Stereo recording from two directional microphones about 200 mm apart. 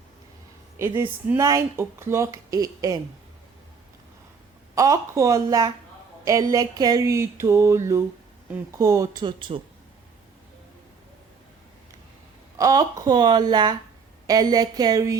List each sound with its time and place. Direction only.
0.8 s speech: 10° right (ahead or behind)
4.7 s speech: 15° right (ahead or behind)
12.5 s speech: 15° right (ahead or behind)